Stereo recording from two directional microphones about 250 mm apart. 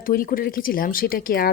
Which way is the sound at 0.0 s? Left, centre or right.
Left.